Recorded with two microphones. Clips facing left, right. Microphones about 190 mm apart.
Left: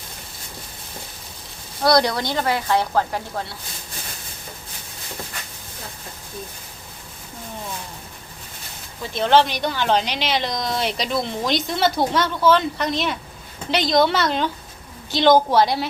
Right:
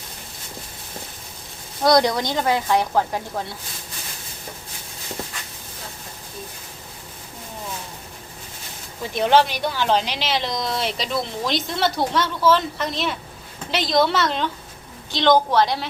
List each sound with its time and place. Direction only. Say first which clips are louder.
1.8 s speech: right 1 dB; 20° right (ahead or behind)
9.1 s a woman's voice: even; 10° right (ahead or behind); by 15.9 s 10° left (ahead or behind)